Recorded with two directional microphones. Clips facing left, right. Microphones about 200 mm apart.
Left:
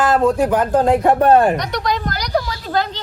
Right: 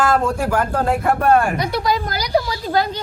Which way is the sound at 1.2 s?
30° left (ahead or behind).